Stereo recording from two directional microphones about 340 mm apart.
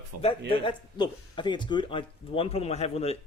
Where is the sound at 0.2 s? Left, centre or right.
Centre.